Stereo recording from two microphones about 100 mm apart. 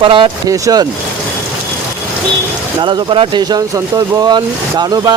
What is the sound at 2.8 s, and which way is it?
Speech, 55° right (ahead or behind).